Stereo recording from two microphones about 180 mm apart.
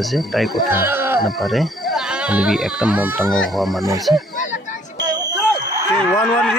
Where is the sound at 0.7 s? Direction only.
10° right (ahead or behind).